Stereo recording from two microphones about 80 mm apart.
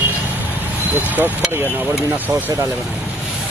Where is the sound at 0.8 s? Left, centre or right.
Right.